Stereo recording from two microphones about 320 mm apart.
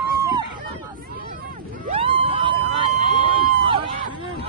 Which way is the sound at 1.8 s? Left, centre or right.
Centre.